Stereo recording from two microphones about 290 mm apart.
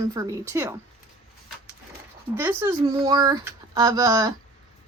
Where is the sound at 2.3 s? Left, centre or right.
Centre.